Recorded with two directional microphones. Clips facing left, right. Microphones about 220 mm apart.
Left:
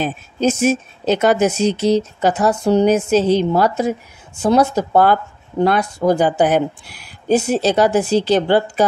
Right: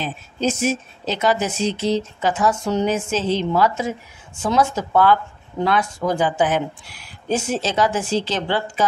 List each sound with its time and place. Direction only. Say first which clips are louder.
0.0 s a woman's voice: left 5 dB; 45° left (ahead or behind)